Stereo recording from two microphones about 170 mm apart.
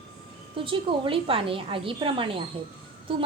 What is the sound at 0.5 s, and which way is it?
A woman's voice, 30° right (ahead or behind).